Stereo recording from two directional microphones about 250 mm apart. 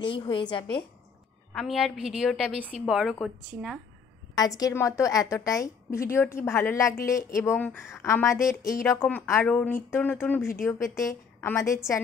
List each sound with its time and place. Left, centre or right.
0.0 s a woman's voice: centre
1.5 s a woman's voice: centre
4.4 s a woman's voice: centre